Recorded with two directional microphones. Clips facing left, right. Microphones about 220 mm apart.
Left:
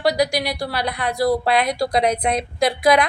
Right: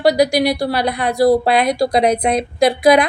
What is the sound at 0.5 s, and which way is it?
A woman's voice, 20° right (ahead or behind).